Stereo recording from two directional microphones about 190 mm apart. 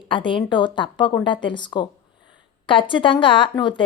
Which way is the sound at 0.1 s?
25° left (ahead or behind).